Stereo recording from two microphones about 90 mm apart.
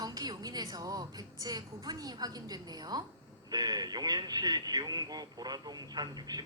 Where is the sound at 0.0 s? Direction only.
45° right (ahead or behind).